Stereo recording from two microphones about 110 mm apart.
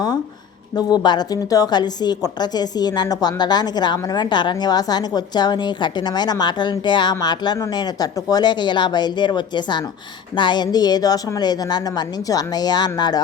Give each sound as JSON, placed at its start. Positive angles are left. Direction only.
{"t": 0.8, "sound": "a woman's voice", "side_deg": 40}